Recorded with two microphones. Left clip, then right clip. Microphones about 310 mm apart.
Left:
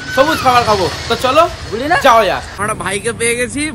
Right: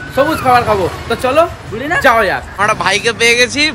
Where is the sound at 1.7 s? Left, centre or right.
Centre.